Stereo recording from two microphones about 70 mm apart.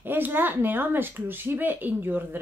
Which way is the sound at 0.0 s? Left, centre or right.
Right.